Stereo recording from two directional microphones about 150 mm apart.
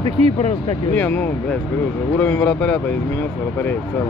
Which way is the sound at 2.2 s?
10° left (ahead or behind).